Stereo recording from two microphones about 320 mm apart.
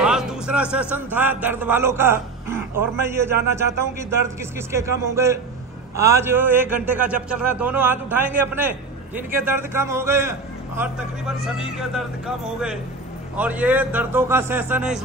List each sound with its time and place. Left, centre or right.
0.0 s a man's voice: centre
11.4 s a man's voice: centre